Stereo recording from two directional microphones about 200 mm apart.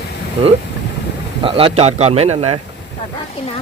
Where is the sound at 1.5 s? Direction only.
25° right (ahead or behind).